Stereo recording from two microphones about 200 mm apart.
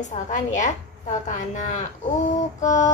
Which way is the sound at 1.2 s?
35° left (ahead or behind).